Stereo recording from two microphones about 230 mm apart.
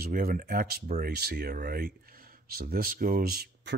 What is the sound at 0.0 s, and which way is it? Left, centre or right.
Speech, right.